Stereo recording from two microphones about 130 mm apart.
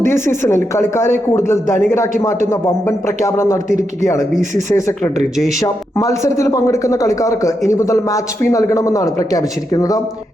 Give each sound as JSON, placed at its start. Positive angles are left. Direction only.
{"t": 0.1, "sound": "a man's voice", "side_deg": 20}